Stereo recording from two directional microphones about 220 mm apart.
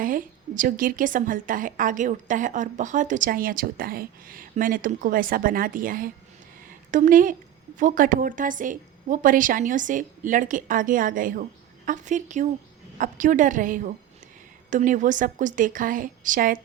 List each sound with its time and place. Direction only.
0.0 s a woman's voice: 40° right (ahead or behind)